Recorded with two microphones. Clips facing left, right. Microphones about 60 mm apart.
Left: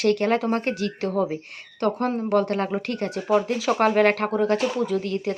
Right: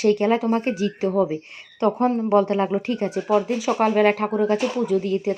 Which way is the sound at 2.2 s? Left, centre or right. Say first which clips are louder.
Right 2 dB; right.